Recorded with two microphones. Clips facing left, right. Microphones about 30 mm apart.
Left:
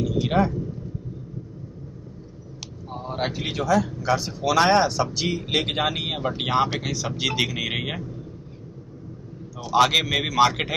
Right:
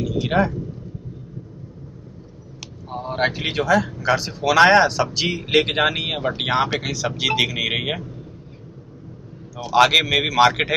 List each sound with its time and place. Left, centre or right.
0.0 s a sound: centre
2.9 s speech: right
9.6 s speech: right